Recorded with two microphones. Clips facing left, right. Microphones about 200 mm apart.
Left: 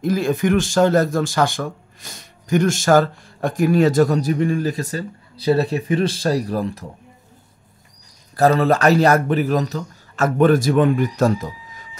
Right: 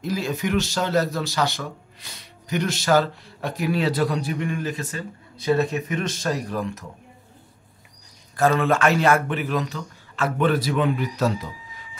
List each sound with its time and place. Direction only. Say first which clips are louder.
0.0 s speech: left 7 dB; 50° left (ahead or behind); by 6.9 s 35° left (ahead or behind)
8.4 s a man's voice: left 4 dB; 35° left (ahead or behind)